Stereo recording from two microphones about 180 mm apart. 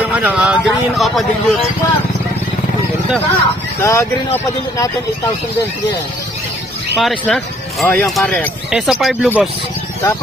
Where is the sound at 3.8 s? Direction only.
15° left (ahead or behind).